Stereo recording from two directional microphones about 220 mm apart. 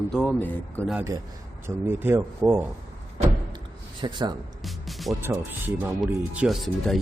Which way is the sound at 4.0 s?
20° right (ahead or behind).